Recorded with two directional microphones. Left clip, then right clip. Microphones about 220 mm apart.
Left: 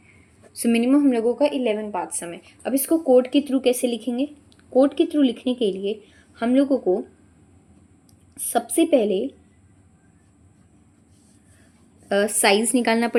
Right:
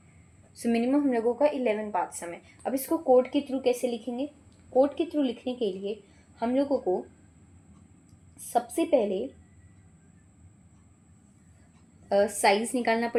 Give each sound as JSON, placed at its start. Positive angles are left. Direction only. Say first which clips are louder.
{"t": 0.5, "sound": "a woman's voice", "louder": "left 7 dB", "side_deg": 40}
{"t": 8.4, "sound": "a woman's voice", "louder": "left 6 dB", "side_deg": 45}
{"t": 12.0, "sound": "a woman's voice", "louder": "left 4 dB", "side_deg": 45}